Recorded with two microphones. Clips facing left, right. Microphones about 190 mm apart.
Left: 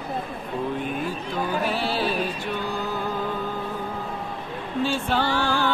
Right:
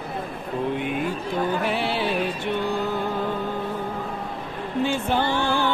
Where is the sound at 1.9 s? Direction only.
20° right (ahead or behind).